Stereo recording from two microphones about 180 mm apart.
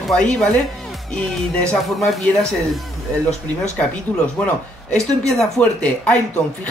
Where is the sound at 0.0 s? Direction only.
5° left (ahead or behind).